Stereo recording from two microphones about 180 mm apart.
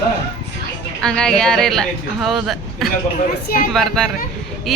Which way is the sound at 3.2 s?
55° left (ahead or behind).